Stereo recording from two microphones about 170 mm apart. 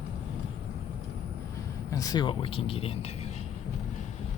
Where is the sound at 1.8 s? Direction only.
20° left (ahead or behind); by 3.3 s 35° left (ahead or behind).